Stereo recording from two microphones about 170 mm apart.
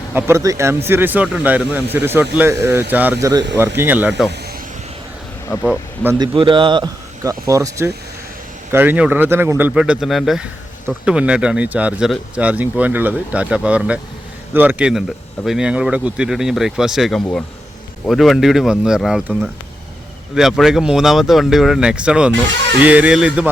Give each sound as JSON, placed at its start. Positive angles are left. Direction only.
{"t": 0.1, "sound": "speech", "side_deg": -15}
{"t": 5.5, "sound": "speech", "side_deg": 15}
{"t": 6.1, "sound": "speech", "side_deg": -30}